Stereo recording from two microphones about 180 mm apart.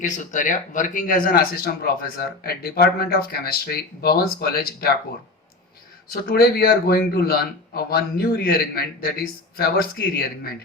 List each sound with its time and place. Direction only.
0.2 s speech: 45° left (ahead or behind)
6.1 s speech: 55° left (ahead or behind)